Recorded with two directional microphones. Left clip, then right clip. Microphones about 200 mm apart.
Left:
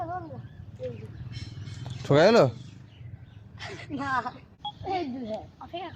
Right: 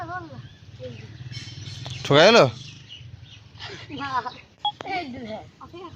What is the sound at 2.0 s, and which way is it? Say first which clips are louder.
Speech: right 5 dB; centre (ahead or behind).